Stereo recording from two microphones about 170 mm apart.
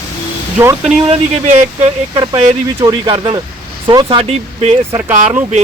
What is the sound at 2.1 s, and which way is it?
Speech, 25° right (ahead or behind).